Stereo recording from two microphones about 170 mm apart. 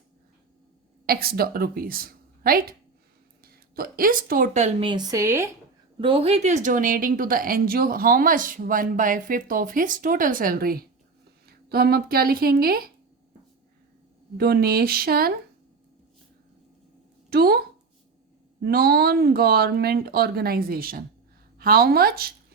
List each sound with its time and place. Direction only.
1.0 s a woman's voice: 65° right (ahead or behind); by 4.9 s 45° right (ahead or behind)
4.9 s speech: 25° right (ahead or behind)
6.0 s a woman's voice: 30° right (ahead or behind); by 12.9 s 60° right (ahead or behind)
14.3 s speech: 65° right (ahead or behind)
17.2 s speech: 65° right (ahead or behind)
18.6 s speech: 65° right (ahead or behind)